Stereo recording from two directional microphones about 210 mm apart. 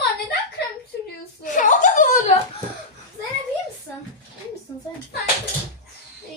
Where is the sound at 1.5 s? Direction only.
35° left (ahead or behind).